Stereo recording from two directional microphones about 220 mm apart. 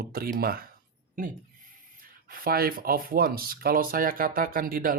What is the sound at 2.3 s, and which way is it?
Speech, 40° right (ahead or behind).